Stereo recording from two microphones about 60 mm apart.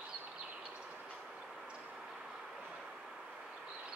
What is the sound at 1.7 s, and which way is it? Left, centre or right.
Vehicle, centre.